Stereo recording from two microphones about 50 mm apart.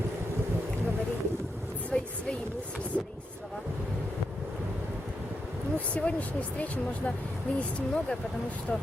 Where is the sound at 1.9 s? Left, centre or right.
Left.